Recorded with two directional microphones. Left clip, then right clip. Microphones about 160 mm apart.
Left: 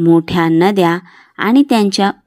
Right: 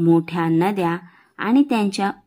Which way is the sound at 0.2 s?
30° left (ahead or behind).